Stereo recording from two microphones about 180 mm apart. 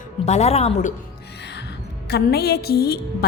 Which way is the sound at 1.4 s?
70° left (ahead or behind).